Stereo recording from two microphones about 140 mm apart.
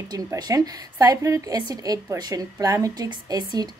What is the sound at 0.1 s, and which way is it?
A woman's voice, 25° right (ahead or behind).